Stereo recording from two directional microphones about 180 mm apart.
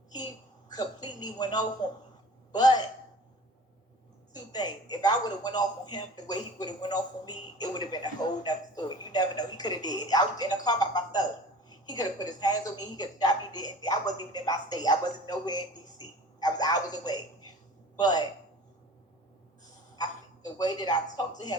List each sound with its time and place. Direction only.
0.7 s speech: 20° left (ahead or behind)
4.4 s speech: 25° left (ahead or behind)
20.0 s speech: 20° left (ahead or behind)